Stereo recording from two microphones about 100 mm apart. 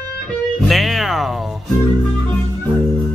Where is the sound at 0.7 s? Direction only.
Centre (ahead or behind).